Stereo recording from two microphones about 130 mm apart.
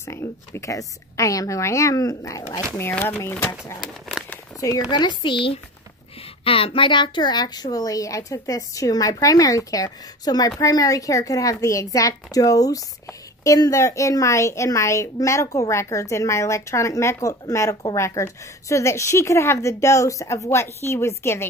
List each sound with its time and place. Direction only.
0.0 s a woman's voice: 20° left (ahead or behind)
2.8 s speech: 15° left (ahead or behind)
4.8 s a woman's voice: 35° left (ahead or behind); by 21.5 s 20° left (ahead or behind)